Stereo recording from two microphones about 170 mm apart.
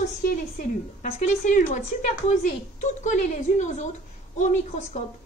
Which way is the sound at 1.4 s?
45° left (ahead or behind).